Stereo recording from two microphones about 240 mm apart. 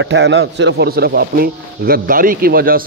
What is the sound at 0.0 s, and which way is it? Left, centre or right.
A man's voice, right.